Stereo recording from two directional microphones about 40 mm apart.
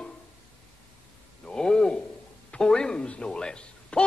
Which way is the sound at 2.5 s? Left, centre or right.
Centre.